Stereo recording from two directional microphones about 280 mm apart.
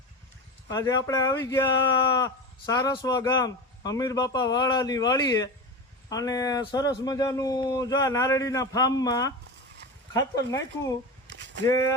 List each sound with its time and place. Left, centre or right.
0.7 s speech: centre
11.3 s a sound: right
11.6 s speech: centre